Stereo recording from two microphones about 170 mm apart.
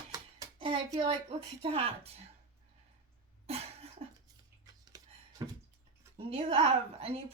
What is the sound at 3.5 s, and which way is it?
Cough, 35° right (ahead or behind).